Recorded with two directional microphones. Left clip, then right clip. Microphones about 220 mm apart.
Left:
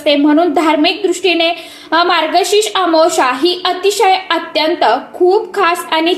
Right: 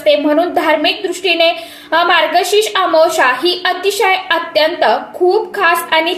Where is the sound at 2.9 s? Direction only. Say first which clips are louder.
Right 1 dB; 20° left (ahead or behind).